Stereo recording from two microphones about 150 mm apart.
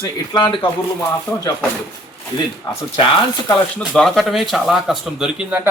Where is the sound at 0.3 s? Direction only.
30° left (ahead or behind).